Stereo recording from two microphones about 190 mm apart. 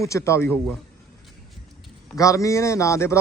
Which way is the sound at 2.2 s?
15° left (ahead or behind).